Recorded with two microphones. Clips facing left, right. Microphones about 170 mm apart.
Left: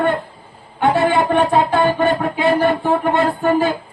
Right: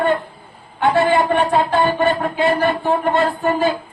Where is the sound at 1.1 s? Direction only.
50° left (ahead or behind).